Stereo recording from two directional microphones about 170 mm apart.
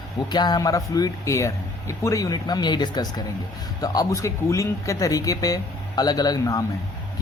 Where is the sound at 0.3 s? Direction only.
25° left (ahead or behind).